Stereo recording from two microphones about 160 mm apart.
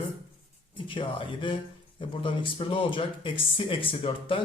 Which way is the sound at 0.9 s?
30° left (ahead or behind).